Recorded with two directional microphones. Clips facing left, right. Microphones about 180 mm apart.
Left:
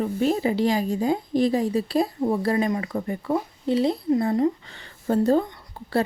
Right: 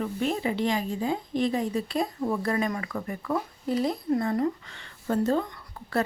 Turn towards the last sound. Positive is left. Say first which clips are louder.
# left 4 dB
turn(degrees=30)  # may be behind; listen again after turning